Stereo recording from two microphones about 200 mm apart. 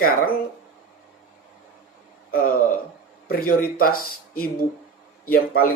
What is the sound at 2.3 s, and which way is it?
A man's voice, 45° left (ahead or behind).